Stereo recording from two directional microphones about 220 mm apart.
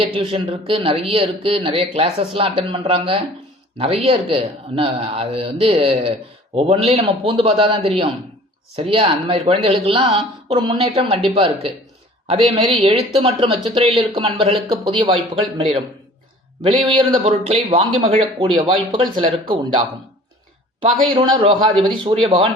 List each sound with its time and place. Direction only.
0.0 s speech: 25° right (ahead or behind)
12.7 s speech: 25° right (ahead or behind)
16.8 s speech: 20° right (ahead or behind)
21.4 s speech: 25° right (ahead or behind)